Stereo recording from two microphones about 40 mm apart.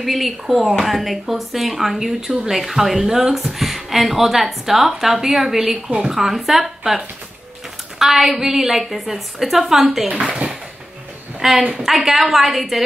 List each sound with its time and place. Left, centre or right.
0.0 s speech: centre
8.0 s speech: centre
10.3 s a sound: centre
11.3 s a woman's voice: centre